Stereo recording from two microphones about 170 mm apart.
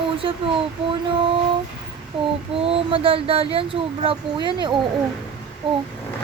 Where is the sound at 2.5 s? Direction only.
35° right (ahead or behind).